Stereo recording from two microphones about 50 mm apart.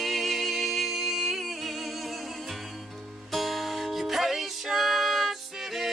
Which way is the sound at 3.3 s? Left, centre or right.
Centre.